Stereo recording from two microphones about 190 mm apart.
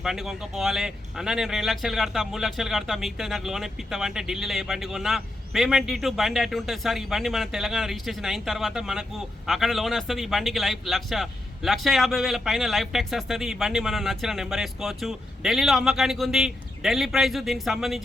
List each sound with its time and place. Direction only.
0.0 s speech: centre (ahead or behind)